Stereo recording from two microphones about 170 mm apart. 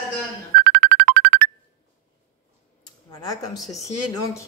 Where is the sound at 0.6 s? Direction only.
65° right (ahead or behind).